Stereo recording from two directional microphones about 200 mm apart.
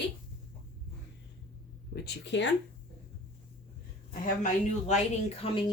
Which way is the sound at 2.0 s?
60° left (ahead or behind).